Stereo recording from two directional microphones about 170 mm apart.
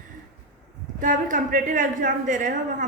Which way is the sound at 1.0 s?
50° right (ahead or behind).